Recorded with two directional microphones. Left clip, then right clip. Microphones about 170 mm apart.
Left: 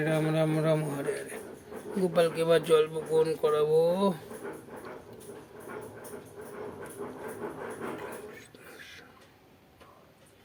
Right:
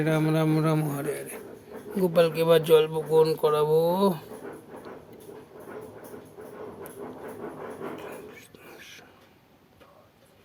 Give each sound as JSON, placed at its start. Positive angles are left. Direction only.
{"t": 0.0, "sound": "speech", "side_deg": -25}
{"t": 7.9, "sound": "whispering", "side_deg": -20}